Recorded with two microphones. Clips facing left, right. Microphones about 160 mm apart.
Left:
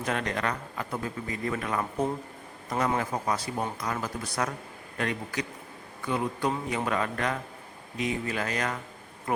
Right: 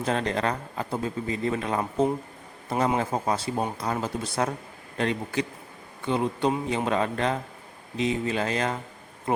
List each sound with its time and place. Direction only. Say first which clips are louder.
0.0 s a man's voice: right 4 dB; 30° right (ahead or behind)